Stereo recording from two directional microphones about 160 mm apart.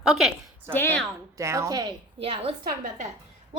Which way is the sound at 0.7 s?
15° left (ahead or behind).